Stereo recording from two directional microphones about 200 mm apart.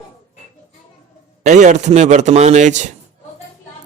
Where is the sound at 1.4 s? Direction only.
35° right (ahead or behind).